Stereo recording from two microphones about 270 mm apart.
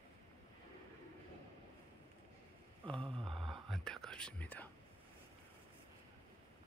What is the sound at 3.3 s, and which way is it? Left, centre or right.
Whispering, centre.